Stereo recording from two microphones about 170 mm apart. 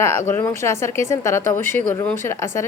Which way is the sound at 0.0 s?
15° left (ahead or behind).